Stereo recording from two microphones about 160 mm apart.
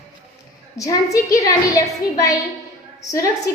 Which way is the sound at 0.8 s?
20° left (ahead or behind).